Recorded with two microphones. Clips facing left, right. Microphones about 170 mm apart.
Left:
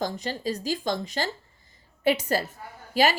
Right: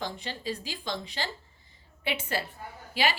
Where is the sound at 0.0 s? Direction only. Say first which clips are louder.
Left 6 dB; 40° left (ahead or behind).